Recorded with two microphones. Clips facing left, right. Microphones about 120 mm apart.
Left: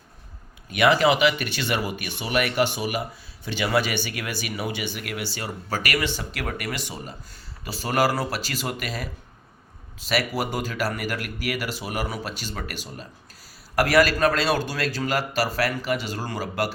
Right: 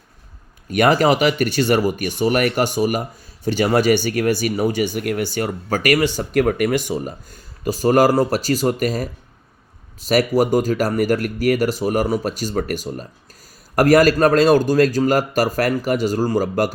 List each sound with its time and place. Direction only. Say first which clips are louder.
0.7 s speech: right 4 dB; 45° right (ahead or behind)